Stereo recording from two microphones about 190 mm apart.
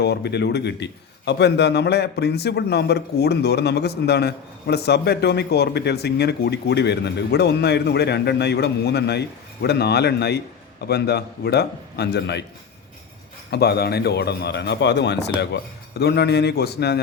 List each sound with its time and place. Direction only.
0.0 s a man's voice: 60° left (ahead or behind)
13.5 s a man's voice: 60° left (ahead or behind)